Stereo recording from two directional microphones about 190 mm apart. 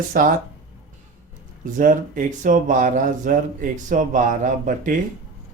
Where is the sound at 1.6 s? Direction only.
45° right (ahead or behind).